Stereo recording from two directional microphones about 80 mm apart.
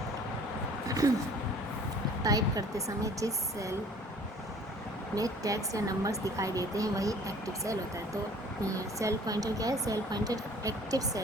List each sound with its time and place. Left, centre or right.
0.9 s a sound: right
2.2 s speech: right
5.1 s speech: right